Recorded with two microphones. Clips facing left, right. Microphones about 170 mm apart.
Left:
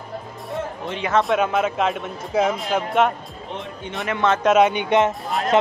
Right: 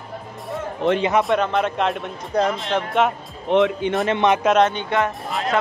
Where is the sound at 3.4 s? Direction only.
85° right.